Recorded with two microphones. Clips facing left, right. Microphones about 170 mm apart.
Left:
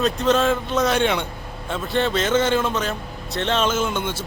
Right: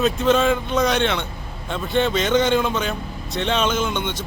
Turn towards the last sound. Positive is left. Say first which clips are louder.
# even
turn(degrees=5)  # may be behind; listen again after turning